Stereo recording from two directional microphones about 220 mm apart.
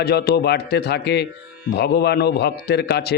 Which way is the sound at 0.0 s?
45° left (ahead or behind).